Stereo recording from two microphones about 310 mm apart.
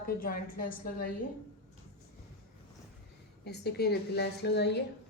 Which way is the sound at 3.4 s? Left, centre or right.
Left.